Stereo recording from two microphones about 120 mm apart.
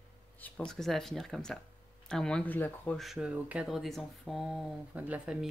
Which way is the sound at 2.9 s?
5° right (ahead or behind).